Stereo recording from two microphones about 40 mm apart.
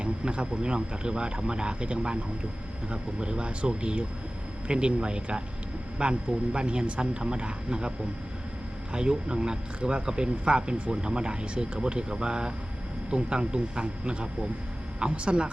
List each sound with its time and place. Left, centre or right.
0.0 s speech: right